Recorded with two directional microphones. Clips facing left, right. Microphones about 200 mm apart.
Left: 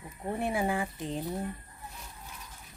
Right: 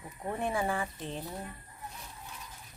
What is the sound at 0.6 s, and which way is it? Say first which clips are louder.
Speech: left 2 dB; 15° left (ahead or behind).